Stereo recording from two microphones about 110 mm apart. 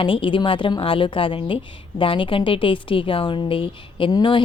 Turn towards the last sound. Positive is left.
turn(degrees=45)  # may be behind; listen again after turning